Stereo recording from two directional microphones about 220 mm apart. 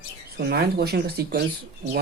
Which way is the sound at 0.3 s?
45° right (ahead or behind).